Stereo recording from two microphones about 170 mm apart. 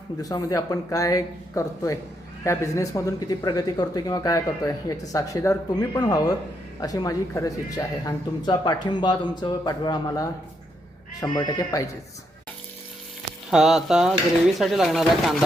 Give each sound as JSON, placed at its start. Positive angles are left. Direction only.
{"t": 0.2, "sound": "speech", "side_deg": 20}
{"t": 13.5, "sound": "speech", "side_deg": -5}